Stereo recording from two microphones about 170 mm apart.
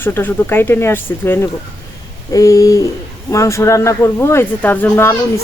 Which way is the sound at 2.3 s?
20° left (ahead or behind).